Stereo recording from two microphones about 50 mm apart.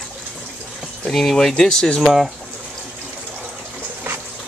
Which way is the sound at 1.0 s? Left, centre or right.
Centre.